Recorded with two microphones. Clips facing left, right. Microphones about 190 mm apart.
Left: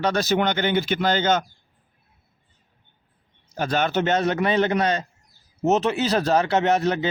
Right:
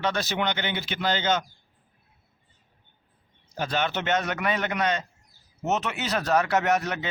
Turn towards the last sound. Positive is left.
turn(degrees=30)  # may be behind; listen again after turning